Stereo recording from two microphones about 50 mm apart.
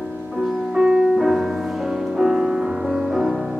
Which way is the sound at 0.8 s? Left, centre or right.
Centre.